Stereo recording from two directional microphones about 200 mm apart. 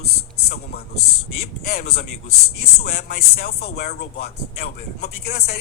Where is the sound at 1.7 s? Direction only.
50° left (ahead or behind).